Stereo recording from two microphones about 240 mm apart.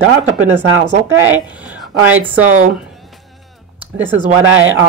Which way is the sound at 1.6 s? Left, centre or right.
Centre.